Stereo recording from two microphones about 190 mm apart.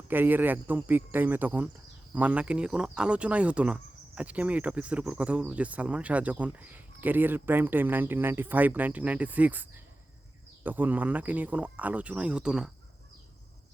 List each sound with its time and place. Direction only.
0.1 s speech: 10° right (ahead or behind)